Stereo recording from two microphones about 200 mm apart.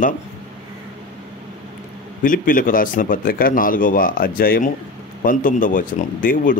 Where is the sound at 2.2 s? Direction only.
45° left (ahead or behind).